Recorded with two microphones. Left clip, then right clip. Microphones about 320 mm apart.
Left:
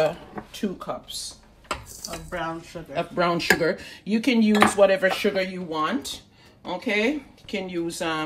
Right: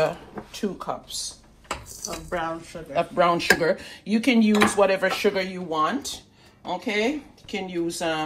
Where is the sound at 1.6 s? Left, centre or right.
Centre.